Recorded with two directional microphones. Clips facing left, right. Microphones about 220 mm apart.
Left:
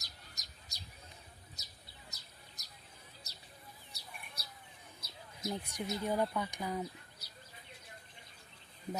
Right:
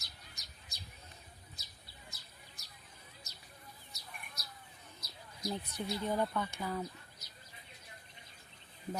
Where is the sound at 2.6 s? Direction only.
40° left (ahead or behind).